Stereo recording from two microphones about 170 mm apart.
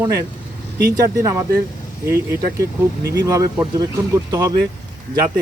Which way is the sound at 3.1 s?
20° right (ahead or behind).